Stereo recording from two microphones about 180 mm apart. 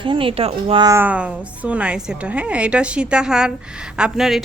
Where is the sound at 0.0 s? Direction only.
30° right (ahead or behind).